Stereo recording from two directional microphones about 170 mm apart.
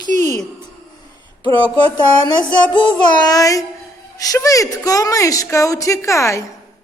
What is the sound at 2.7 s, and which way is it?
A woman's voice, 25° left (ahead or behind).